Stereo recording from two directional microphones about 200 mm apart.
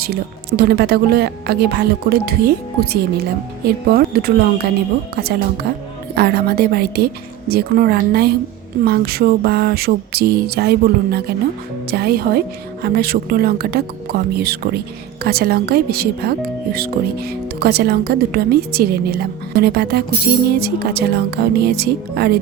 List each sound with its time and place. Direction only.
0.0 s speech: 50° right (ahead or behind)